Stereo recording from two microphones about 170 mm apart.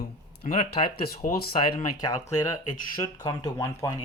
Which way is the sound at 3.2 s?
20° left (ahead or behind).